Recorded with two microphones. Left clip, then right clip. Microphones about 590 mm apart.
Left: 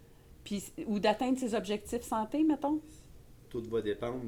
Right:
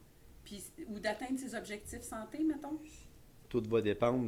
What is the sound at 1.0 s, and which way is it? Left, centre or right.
A woman's voice, left.